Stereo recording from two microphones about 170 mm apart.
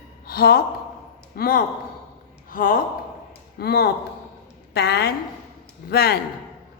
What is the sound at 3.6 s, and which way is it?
Speech, 65° left (ahead or behind).